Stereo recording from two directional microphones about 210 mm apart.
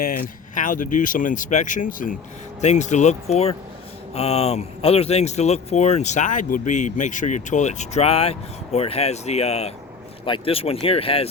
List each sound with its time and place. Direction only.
0.0 s speech: 40° left (ahead or behind)